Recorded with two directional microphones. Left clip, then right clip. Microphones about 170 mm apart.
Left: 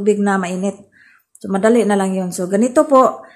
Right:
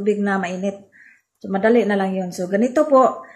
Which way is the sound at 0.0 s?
25° left (ahead or behind).